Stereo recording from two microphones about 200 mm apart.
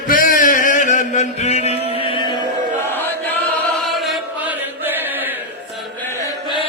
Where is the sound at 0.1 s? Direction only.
45° left (ahead or behind).